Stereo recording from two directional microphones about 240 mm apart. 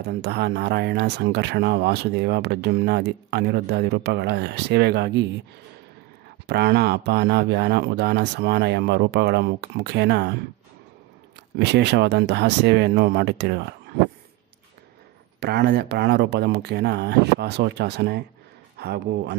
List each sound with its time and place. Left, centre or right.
0.0 s speech: right
6.4 s speech: right
11.5 s speech: right
15.4 s speech: right